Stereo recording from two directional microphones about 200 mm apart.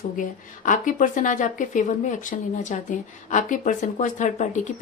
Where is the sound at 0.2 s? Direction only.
40° left (ahead or behind).